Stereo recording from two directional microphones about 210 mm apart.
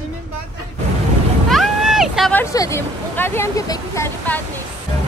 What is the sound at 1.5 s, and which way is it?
Boat, centre (ahead or behind).